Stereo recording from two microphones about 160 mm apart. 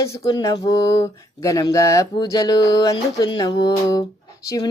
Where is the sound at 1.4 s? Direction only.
20° left (ahead or behind).